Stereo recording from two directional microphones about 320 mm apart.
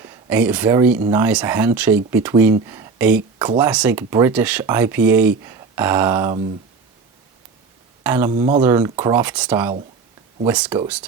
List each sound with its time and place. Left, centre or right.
0.0 s speech: centre
8.0 s speech: centre
8.3 s speech: centre
8.6 s speech: centre